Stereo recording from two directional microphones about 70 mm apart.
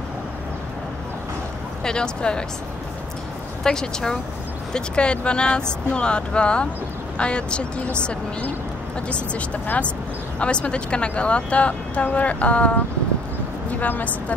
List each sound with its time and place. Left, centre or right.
1.8 s speech: centre
3.6 s a woman's voice: centre